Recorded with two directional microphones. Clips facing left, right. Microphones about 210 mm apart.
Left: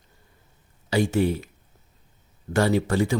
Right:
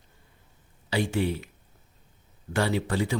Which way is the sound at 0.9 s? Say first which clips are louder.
Left 5 dB; 45° left (ahead or behind).